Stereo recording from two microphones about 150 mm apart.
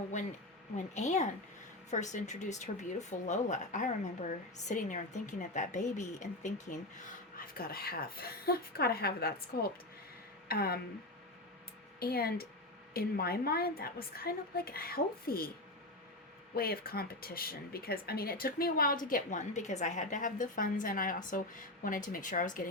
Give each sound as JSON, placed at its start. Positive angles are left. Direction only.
{"t": 0.9, "sound": "speech", "side_deg": 50}
{"t": 7.3, "sound": "a woman's voice", "side_deg": 80}
{"t": 11.9, "sound": "a woman's voice", "side_deg": 90}
{"t": 16.6, "sound": "a woman's voice", "side_deg": 90}
{"t": 19.0, "sound": "speech", "side_deg": 60}